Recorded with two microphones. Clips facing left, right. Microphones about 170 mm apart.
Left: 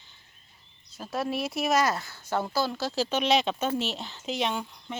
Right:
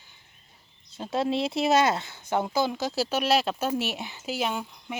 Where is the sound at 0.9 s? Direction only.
25° right (ahead or behind).